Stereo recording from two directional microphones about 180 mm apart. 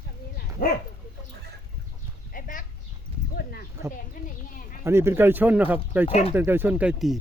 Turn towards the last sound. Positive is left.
turn(degrees=-5)  # may be behind; listen again after turning